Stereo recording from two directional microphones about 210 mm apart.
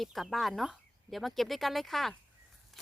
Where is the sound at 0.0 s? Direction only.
Centre (ahead or behind).